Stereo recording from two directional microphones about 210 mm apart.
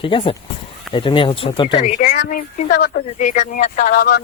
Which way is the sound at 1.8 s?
40° left (ahead or behind).